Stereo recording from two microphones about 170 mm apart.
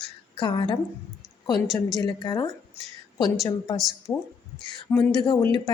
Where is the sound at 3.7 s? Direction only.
Centre (ahead or behind).